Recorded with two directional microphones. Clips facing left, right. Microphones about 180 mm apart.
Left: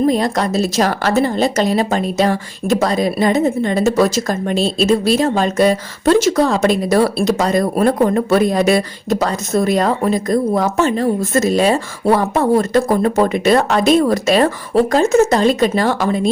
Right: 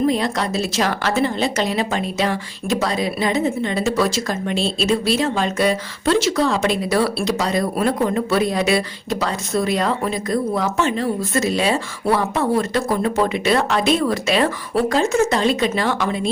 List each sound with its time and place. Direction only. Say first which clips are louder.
0.1 s speech: left 4 dB; 40° left (ahead or behind)